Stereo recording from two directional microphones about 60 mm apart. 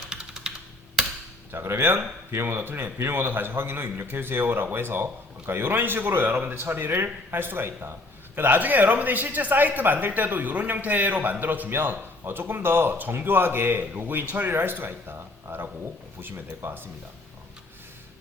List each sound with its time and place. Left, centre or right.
0.1 s computer keyboard: centre
1.5 s a man's voice: right